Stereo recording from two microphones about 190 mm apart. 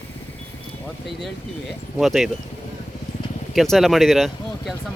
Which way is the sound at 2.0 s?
Centre (ahead or behind).